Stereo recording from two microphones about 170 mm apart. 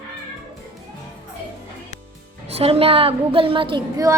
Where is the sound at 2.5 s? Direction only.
35° right (ahead or behind).